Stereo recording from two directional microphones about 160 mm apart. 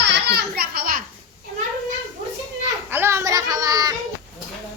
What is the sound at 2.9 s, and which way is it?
Children playing, 15° right (ahead or behind).